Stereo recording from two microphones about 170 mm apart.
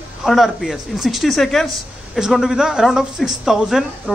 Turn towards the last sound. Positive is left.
turn(degrees=0)  # may be behind; listen again after turning